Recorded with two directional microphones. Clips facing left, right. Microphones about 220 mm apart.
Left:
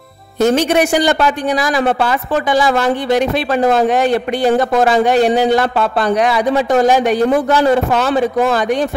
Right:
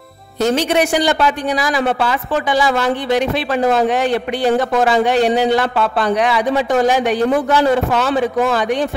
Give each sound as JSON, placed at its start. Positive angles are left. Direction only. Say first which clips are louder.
{"t": 0.4, "sound": "a woman's voice", "louder": "left 3 dB", "side_deg": 50}